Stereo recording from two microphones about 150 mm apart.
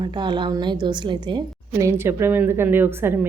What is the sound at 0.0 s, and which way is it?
A woman's voice, 30° right (ahead or behind).